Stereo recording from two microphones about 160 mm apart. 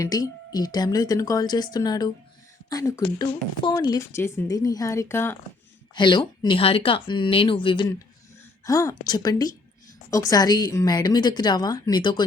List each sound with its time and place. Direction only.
0.0 s a woman's voice: 25° left (ahead or behind)
5.9 s speech: 30° left (ahead or behind)
8.6 s speech: 20° left (ahead or behind)